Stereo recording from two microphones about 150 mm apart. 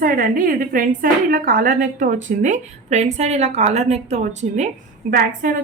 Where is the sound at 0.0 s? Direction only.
70° right (ahead or behind); by 4.7 s 50° right (ahead or behind).